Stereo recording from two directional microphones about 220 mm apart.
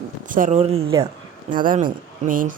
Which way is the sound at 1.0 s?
20° right (ahead or behind).